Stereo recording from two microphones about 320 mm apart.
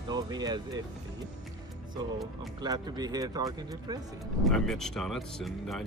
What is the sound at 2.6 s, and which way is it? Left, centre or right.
Speech, centre.